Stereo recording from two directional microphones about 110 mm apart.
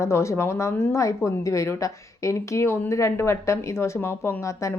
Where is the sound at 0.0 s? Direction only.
25° left (ahead or behind).